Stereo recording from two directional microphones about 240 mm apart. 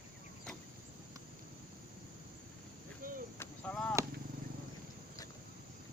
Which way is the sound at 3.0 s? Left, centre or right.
Right.